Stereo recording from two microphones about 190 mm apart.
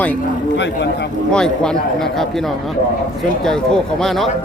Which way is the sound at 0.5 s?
65° left (ahead or behind).